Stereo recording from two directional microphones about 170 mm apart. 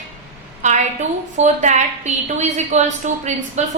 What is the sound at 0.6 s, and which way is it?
A woman's voice, 45° right (ahead or behind).